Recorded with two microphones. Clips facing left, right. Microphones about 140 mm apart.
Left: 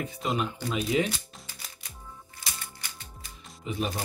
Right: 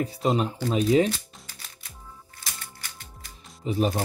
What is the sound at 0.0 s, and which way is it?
Speech, 35° right (ahead or behind).